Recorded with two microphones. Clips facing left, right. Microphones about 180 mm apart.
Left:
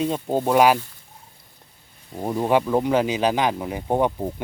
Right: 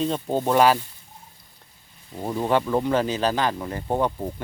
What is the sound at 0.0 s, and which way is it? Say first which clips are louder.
Speech: left 1 dB; 10° left (ahead or behind).